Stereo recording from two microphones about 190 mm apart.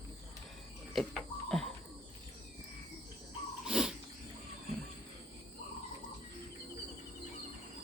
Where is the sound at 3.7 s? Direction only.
5° right (ahead or behind).